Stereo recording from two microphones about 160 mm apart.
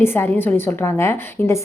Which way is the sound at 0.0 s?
15° left (ahead or behind).